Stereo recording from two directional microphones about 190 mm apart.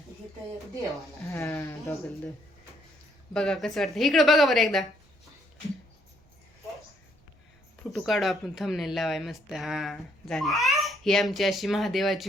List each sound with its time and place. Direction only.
1.3 s speech: 15° left (ahead or behind)
3.3 s speech: 5° left (ahead or behind)
7.9 s speech: centre (ahead or behind)